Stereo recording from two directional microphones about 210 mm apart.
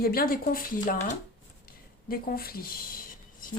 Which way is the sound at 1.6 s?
45° left (ahead or behind).